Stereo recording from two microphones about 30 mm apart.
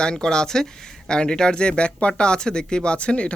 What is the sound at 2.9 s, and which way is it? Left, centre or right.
Speech, left.